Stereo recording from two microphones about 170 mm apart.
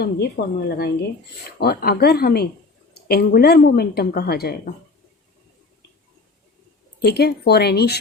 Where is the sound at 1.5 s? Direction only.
70° left (ahead or behind).